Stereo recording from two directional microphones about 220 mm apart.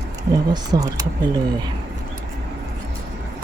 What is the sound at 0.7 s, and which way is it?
Speech, 15° right (ahead or behind).